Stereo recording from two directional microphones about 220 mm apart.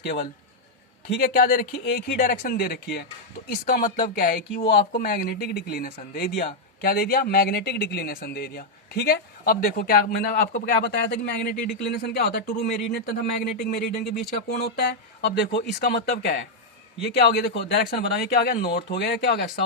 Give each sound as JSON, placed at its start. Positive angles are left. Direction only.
{"t": 0.0, "sound": "speech", "side_deg": 50}